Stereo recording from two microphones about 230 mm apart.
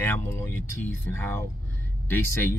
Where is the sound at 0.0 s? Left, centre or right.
Centre.